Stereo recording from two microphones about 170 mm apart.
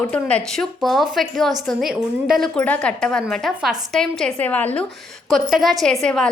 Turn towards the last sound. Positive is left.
turn(degrees=5)  # may be behind; listen again after turning